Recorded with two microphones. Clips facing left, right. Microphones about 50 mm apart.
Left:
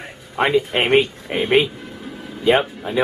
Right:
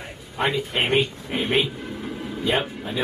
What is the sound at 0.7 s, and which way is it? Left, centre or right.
Speech, left.